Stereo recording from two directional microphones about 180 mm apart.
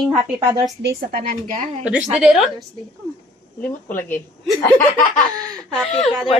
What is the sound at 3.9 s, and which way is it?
Speech, 10° left (ahead or behind).